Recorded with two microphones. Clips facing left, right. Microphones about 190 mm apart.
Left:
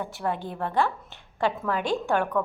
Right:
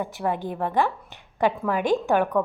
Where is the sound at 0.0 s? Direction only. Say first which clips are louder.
Right 3 dB; 15° right (ahead or behind).